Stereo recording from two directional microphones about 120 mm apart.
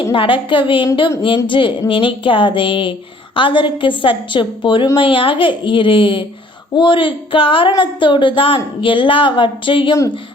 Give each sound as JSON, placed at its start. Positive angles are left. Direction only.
{"t": 0.1, "sound": "speech", "side_deg": 45}